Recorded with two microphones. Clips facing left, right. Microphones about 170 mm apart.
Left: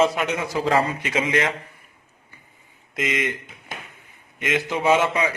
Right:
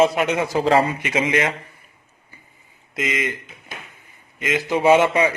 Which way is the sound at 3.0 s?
Centre (ahead or behind).